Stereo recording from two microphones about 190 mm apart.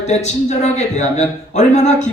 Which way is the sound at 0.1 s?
35° left (ahead or behind).